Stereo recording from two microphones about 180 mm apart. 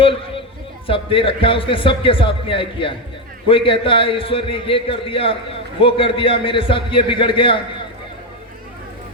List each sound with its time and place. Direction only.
0.9 s a man's voice: 30° left (ahead or behind)